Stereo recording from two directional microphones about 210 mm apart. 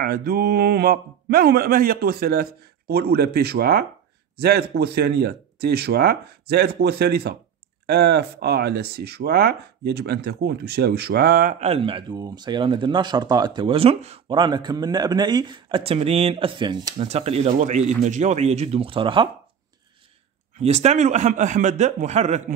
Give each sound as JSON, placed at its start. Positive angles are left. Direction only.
{"t": 0.0, "sound": "a man's voice", "side_deg": -45}
{"t": 20.5, "sound": "speech", "side_deg": -30}